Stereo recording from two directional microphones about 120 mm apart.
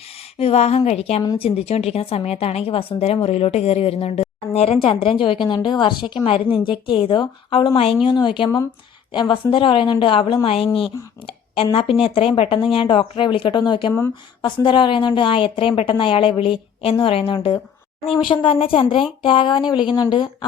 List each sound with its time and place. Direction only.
0.3 s a woman's voice: 60° left (ahead or behind); by 20.3 s 40° left (ahead or behind)